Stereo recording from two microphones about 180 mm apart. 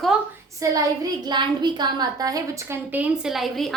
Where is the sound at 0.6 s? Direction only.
20° right (ahead or behind).